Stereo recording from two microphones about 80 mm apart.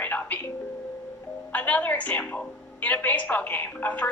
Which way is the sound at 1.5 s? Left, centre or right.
Centre.